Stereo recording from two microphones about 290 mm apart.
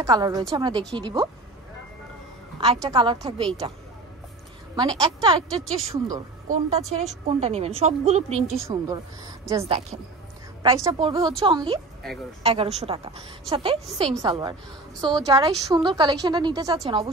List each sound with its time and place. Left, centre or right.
0.0 s a woman's voice: centre
2.6 s a woman's voice: centre
4.7 s a woman's voice: centre
6.4 s a woman's voice: right
8.5 s a woman's voice: centre